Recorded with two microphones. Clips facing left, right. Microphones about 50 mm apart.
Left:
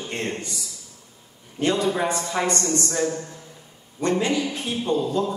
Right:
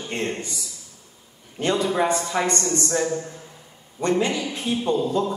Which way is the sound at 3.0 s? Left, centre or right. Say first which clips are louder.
Even; centre.